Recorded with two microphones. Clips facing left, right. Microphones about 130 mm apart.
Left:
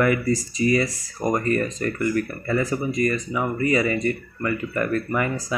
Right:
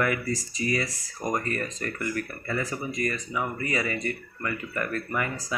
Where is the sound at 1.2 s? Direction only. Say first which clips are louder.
Left 6 dB; 55° left (ahead or behind).